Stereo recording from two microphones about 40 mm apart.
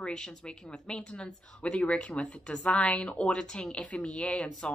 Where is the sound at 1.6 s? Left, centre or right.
Left.